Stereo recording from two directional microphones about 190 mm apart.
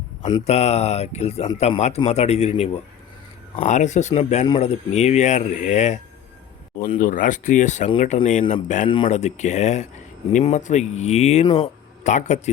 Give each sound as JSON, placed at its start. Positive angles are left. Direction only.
{"t": 0.3, "sound": "speech", "side_deg": 30}